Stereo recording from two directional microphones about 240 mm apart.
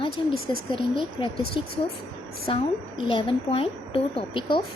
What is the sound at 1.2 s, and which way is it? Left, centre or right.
Speech, centre.